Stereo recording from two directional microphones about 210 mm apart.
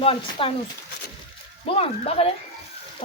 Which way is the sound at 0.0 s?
25° left (ahead or behind).